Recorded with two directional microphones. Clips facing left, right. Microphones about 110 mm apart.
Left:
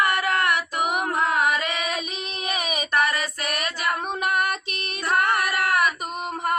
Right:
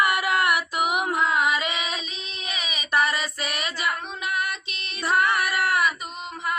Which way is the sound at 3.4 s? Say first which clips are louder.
Left 1 dB; 55° left (ahead or behind).